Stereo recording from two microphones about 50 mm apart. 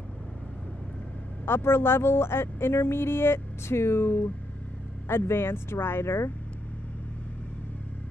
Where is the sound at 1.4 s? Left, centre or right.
Left.